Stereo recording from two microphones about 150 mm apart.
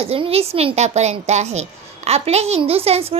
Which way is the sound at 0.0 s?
40° right (ahead or behind).